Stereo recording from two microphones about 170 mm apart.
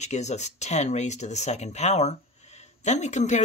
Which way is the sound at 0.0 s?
40° left (ahead or behind).